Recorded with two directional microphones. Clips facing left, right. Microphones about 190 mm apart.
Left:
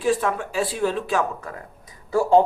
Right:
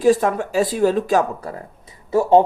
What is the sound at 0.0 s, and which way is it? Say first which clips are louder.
Speech: right 6 dB; 40° right (ahead or behind).